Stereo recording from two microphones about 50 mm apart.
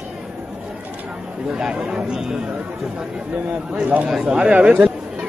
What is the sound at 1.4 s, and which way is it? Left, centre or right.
Speech, centre.